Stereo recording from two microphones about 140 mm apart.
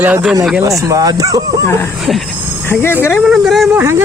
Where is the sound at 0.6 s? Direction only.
25° right (ahead or behind).